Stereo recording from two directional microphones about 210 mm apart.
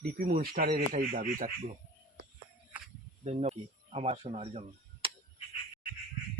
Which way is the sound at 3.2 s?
30° right (ahead or behind).